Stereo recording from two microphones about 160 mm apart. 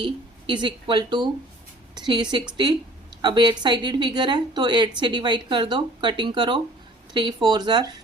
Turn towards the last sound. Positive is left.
turn(degrees=-25)  # may be behind; listen again after turning